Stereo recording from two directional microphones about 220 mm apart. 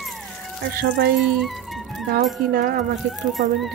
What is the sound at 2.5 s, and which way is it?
Speech, 40° right (ahead or behind).